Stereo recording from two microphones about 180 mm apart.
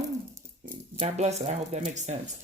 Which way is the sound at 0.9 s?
40° right (ahead or behind).